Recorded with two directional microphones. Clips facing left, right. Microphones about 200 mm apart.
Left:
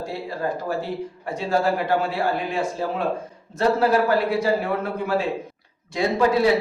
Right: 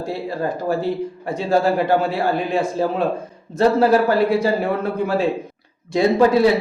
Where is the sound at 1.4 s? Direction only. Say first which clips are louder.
Right 4 dB; 30° right (ahead or behind).